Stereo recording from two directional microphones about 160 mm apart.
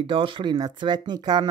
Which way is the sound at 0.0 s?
30° right (ahead or behind).